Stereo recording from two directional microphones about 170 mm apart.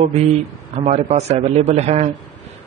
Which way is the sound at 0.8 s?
40° right (ahead or behind).